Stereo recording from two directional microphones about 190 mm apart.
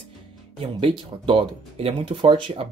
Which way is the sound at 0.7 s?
25° right (ahead or behind).